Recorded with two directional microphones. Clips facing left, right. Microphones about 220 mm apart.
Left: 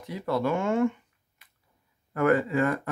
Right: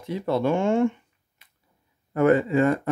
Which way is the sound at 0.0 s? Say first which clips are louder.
Right 4 dB; 25° right (ahead or behind).